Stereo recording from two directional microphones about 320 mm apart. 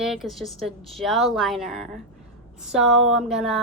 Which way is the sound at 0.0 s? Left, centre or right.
Centre.